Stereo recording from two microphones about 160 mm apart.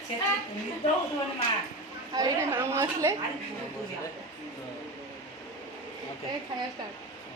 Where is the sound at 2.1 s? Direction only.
20° right (ahead or behind).